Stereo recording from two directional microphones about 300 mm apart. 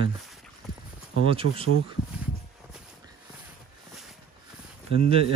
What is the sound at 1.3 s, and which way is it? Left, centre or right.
Speech, centre.